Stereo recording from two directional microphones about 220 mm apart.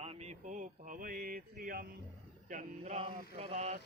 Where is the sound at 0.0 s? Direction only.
30° right (ahead or behind).